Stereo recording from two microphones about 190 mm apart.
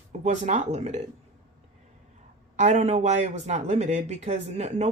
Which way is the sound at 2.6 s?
35° right (ahead or behind).